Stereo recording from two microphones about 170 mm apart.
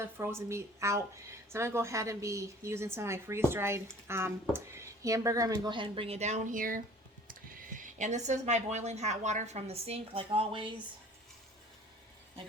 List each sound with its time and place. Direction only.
0.2 s a woman's voice: 15° right (ahead or behind)